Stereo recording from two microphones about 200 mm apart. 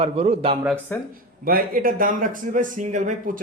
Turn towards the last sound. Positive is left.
turn(degrees=-40)  # may be behind; listen again after turning